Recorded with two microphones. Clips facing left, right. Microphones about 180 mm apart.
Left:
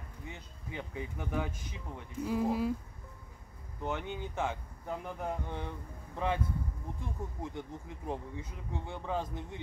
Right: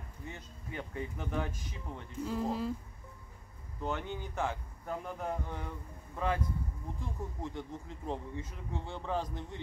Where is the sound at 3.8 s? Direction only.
15° left (ahead or behind).